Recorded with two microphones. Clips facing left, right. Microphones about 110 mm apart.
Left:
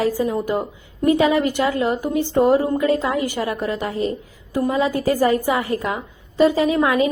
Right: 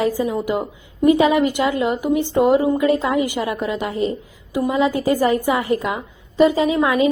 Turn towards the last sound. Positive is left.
turn(degrees=-20)  # may be behind; listen again after turning